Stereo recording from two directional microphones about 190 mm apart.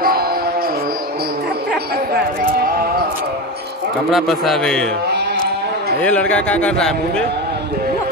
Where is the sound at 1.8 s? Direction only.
55° right (ahead or behind).